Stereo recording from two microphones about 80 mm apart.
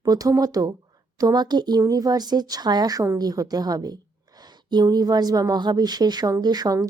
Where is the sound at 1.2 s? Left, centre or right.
Right.